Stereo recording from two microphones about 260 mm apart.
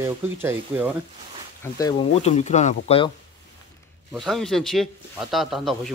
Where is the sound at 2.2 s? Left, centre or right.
Left.